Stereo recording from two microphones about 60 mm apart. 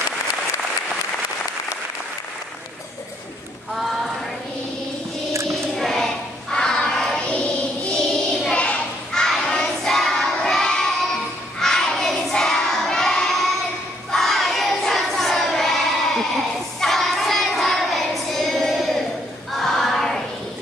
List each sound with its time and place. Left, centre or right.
3.7 s a sound: centre
5.8 s a sound: centre
7.2 s music: left
8.0 s child singing: centre
11.6 s crowd: centre
14.1 s child singing: centre
19.5 s choir: centre